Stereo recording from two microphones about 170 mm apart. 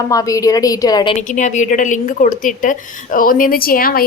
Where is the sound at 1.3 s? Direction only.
45° left (ahead or behind).